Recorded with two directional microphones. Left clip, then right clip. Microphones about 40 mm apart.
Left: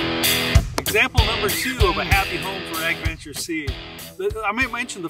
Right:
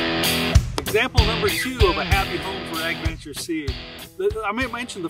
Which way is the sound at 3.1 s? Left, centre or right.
Left.